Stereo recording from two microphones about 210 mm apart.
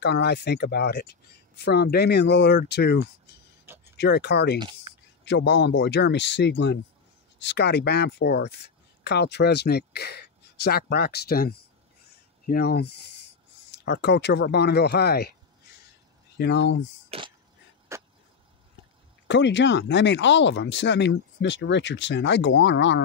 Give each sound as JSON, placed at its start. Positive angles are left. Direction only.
{"t": 0.0, "sound": "speech", "side_deg": 55}
{"t": 4.6, "sound": "speech", "side_deg": -20}
{"t": 5.2, "sound": "speech", "side_deg": 55}
{"t": 16.3, "sound": "speech", "side_deg": 55}
{"t": 17.1, "sound": "speech", "side_deg": -25}
{"t": 17.9, "sound": "vehicle", "side_deg": -15}
{"t": 19.2, "sound": "speech", "side_deg": 60}